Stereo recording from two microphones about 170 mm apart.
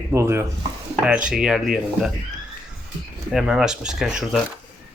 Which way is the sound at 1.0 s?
5° right (ahead or behind).